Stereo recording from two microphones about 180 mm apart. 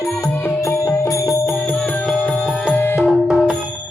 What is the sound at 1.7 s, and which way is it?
Music, 5° left (ahead or behind).